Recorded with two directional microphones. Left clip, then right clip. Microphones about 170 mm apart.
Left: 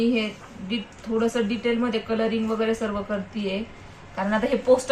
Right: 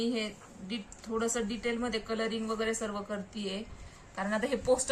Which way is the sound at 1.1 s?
20° right (ahead or behind).